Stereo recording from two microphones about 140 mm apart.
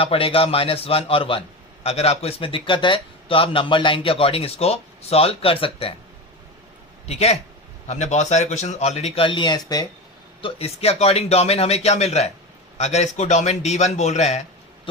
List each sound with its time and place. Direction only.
0.0 s a man's voice: 40° left (ahead or behind)
7.1 s speech: 50° left (ahead or behind); by 9.8 s 30° left (ahead or behind)
10.4 s speech: 45° left (ahead or behind)